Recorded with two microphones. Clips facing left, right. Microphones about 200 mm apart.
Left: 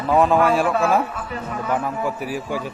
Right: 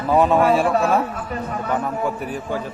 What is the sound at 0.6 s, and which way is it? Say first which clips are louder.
Speech: right 1 dB; 35° right (ahead or behind).